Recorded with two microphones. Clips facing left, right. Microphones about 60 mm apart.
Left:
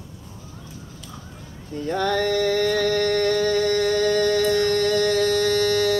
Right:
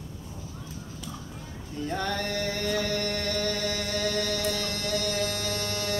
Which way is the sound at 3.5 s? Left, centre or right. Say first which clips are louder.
Left 10 dB; left.